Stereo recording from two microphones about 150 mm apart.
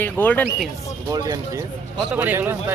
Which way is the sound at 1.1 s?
25° right (ahead or behind).